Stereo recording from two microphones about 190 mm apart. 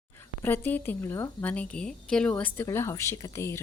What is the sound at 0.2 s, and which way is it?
Speech, 10° left (ahead or behind).